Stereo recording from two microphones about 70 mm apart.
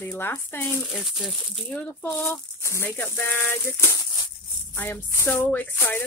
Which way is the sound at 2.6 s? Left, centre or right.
Left.